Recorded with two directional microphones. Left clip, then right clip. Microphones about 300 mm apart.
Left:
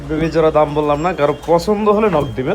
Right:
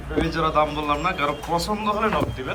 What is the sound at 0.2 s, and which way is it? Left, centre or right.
A man's voice, left.